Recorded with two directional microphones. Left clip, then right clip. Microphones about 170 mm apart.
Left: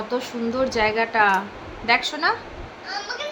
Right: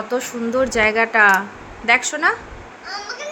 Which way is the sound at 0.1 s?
20° right (ahead or behind).